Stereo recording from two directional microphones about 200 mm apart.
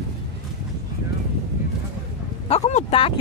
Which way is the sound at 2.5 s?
35° left (ahead or behind).